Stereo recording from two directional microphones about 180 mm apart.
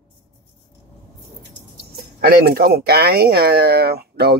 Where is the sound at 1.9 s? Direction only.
60° right (ahead or behind).